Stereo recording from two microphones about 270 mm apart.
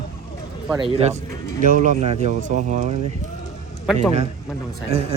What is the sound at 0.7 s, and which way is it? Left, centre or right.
A man's voice, centre.